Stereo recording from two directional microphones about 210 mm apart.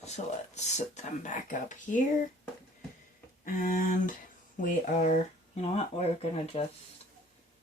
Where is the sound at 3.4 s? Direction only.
40° left (ahead or behind).